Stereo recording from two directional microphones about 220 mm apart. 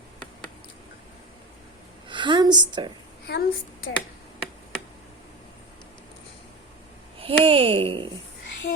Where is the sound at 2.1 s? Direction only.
20° right (ahead or behind).